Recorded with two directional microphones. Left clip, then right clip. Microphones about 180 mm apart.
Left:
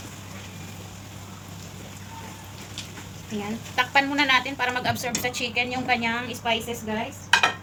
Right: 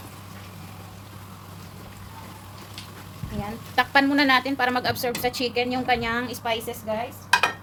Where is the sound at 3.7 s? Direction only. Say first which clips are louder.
Right 2 dB; 85° right.